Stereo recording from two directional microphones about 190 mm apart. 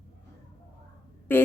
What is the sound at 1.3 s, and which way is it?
Speech, 10° left (ahead or behind).